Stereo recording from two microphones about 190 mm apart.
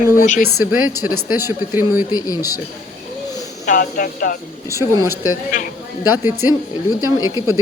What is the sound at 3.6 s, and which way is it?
Speech, 45° left (ahead or behind).